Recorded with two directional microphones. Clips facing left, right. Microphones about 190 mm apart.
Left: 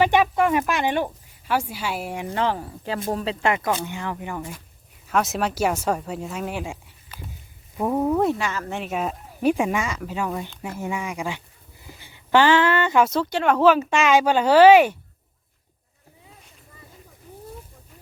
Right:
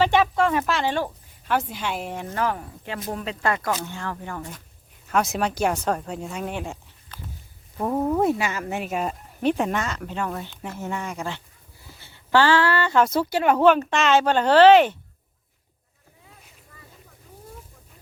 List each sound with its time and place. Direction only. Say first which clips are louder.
0.0 s speech: left 1 dB; 15° left (ahead or behind)
2.3 s speech: left 2 dB; 25° left (ahead or behind)
3.8 s speech: left 2 dB; 15° left (ahead or behind)
11.9 s a sound: left 2 dB; 15° left (ahead or behind)
13.1 s speech: even; 5° right (ahead or behind); by 14.9 s 10° left (ahead or behind)